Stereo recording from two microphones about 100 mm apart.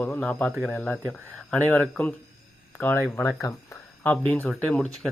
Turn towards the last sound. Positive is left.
turn(degrees=5)  # may be behind; listen again after turning